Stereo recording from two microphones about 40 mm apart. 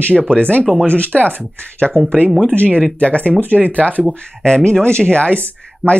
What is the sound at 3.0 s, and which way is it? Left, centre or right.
Speech, left.